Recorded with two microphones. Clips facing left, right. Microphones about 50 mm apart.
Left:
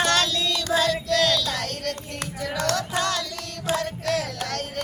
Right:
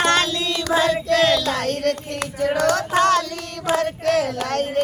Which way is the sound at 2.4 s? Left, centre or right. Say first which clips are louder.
Right 7 dB; right.